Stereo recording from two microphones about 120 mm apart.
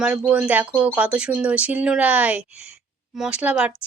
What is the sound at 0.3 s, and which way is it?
Speech, 15° right (ahead or behind).